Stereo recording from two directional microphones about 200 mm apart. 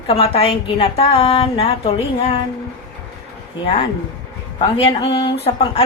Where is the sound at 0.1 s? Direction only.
30° left (ahead or behind).